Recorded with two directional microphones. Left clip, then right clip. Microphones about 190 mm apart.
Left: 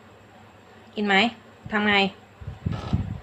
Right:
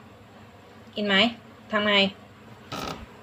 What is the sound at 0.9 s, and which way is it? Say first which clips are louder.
Speech: left 1 dB; 45° left (ahead or behind).